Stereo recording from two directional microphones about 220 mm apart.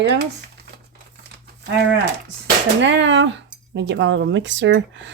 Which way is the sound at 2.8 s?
55° right (ahead or behind).